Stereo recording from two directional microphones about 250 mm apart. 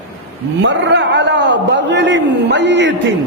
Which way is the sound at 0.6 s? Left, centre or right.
Right.